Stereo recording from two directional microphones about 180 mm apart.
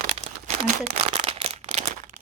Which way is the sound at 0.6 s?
35° right (ahead or behind).